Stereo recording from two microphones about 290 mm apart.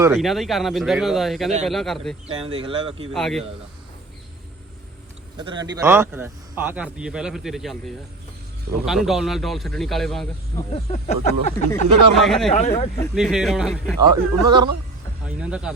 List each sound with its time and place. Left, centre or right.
0.0 s a man's voice: centre
2.2 s speech: centre
3.1 s a man's voice: centre
5.4 s a man's voice: centre
10.7 s a sound: left
11.7 s a man's voice: centre
12.5 s a sound: left
13.0 s a man's voice: centre
14.4 s speech: centre
15.4 s a man's voice: centre